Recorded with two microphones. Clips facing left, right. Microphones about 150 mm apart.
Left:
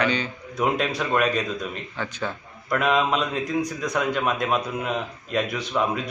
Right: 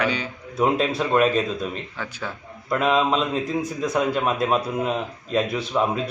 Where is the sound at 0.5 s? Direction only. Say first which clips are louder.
Right 3 dB; 25° right (ahead or behind).